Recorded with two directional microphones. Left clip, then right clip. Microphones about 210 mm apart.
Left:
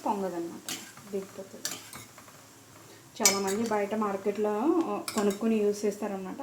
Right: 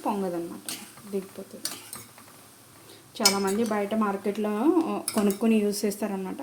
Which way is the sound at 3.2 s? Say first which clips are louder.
Right 3 dB; 55° right (ahead or behind).